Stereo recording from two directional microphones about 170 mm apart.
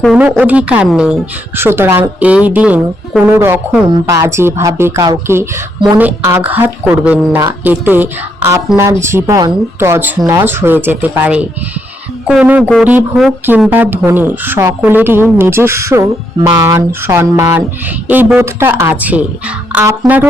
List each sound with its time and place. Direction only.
0.0 s speech: 5° right (ahead or behind)